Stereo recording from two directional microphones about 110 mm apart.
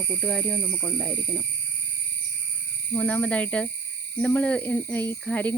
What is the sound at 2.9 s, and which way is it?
Speech, 15° left (ahead or behind).